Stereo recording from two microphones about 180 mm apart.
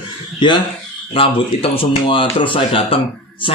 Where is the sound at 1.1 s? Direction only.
30° left (ahead or behind).